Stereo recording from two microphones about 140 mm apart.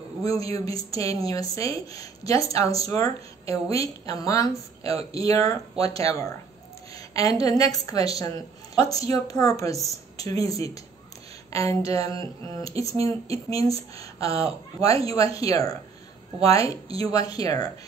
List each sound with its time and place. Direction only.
0.2 s speech: 25° left (ahead or behind)
12.2 s speech: 25° left (ahead or behind)